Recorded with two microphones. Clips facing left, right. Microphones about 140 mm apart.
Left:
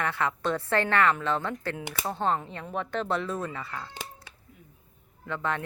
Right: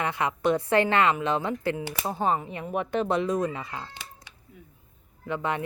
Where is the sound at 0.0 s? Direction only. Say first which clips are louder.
Right 3 dB; 15° right (ahead or behind).